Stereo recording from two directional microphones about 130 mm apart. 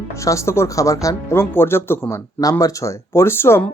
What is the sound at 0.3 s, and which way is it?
Speech, 20° left (ahead or behind).